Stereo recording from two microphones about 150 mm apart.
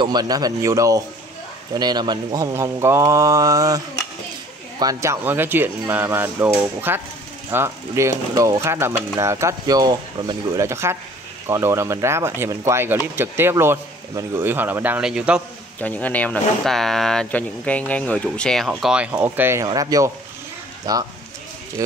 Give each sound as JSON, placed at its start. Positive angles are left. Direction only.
{"t": 0.0, "sound": "speech", "side_deg": -25}
{"t": 10.6, "sound": "speech", "side_deg": -20}
{"t": 15.8, "sound": "speech", "side_deg": 10}
{"t": 18.7, "sound": "speech", "side_deg": -5}